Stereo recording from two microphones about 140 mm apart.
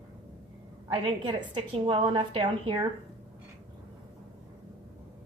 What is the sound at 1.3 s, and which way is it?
A woman's voice, 35° right (ahead or behind).